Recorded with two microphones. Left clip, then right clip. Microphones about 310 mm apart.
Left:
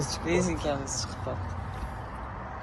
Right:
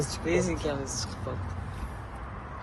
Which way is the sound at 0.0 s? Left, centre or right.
Centre.